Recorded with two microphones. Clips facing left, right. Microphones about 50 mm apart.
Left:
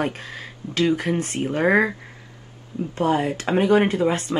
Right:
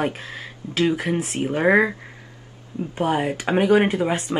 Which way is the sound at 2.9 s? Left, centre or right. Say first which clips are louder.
Left 1 dB; centre.